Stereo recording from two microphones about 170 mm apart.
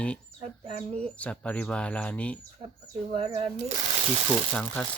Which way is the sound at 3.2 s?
35° right (ahead or behind).